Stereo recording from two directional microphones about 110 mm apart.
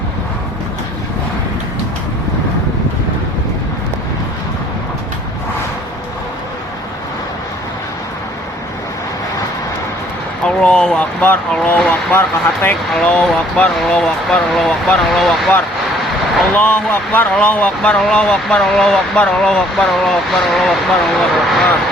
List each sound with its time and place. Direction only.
10.4 s a sound: 10° left (ahead or behind)
12.9 s speech: 5° left (ahead or behind)
16.6 s speech: 15° left (ahead or behind)